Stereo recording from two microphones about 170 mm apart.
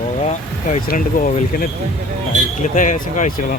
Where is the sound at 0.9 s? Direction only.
50° left (ahead or behind).